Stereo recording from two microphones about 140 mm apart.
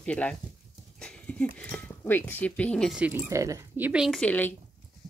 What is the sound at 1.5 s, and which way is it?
Speech, 10° left (ahead or behind).